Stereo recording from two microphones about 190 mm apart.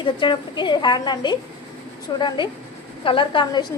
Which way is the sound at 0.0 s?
25° left (ahead or behind).